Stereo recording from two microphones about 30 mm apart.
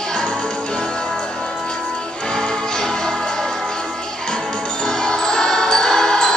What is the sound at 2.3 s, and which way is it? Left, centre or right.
Music, left.